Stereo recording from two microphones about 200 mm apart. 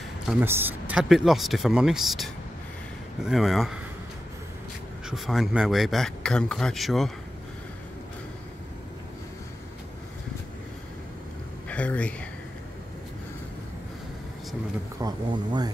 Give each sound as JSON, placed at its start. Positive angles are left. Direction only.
{"t": 0.3, "sound": "speech", "side_deg": -10}
{"t": 5.1, "sound": "speech", "side_deg": 0}
{"t": 11.7, "sound": "speech", "side_deg": 5}
{"t": 15.0, "sound": "speech", "side_deg": -20}